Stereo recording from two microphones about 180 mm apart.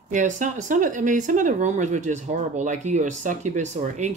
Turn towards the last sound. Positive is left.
turn(degrees=-40)  # may be behind; listen again after turning